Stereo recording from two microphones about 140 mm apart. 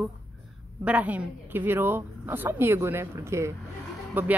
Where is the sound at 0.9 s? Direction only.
10° right (ahead or behind).